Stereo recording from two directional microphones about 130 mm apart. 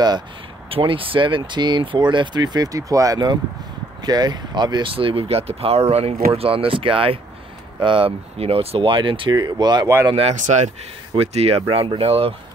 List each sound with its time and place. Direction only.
0.7 s speech: 45° right (ahead or behind)
10.3 s speech: 70° right (ahead or behind)
11.1 s speech: 50° right (ahead or behind)